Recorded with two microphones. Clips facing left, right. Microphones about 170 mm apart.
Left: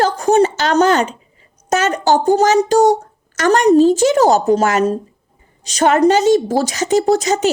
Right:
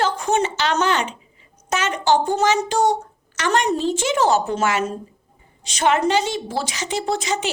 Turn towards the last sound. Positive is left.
turn(degrees=40)  # may be behind; listen again after turning